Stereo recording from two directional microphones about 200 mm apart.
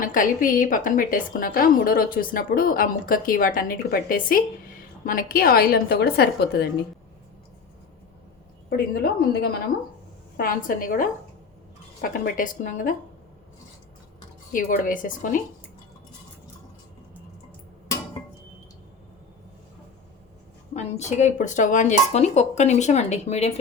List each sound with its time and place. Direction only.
0.0 s a woman's voice: 40° left (ahead or behind)
8.7 s a woman's voice: 50° left (ahead or behind)
14.5 s speech: 40° left (ahead or behind)
20.7 s speech: 35° left (ahead or behind)